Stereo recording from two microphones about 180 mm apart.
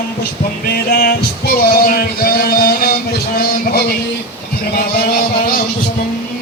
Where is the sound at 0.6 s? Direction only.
60° left (ahead or behind).